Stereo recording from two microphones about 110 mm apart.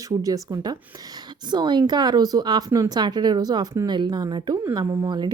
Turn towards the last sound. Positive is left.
turn(degrees=-40)  # may be behind; listen again after turning